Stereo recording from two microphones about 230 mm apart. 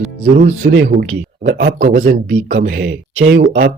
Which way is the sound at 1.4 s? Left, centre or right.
Right.